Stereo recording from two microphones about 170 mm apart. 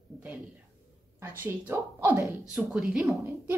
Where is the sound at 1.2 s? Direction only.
15° right (ahead or behind).